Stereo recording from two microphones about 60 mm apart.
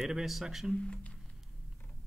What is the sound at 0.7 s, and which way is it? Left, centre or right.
Speech, centre.